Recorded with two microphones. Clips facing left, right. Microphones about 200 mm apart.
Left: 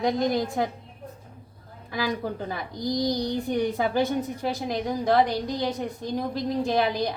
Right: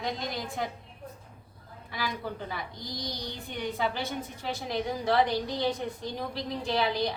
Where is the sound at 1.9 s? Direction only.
45° left (ahead or behind).